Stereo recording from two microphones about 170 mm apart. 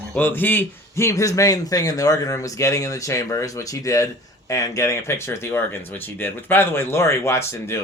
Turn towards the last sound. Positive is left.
turn(degrees=15)  # may be behind; listen again after turning